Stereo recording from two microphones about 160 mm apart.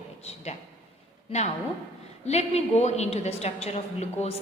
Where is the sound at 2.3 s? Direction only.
40° left (ahead or behind).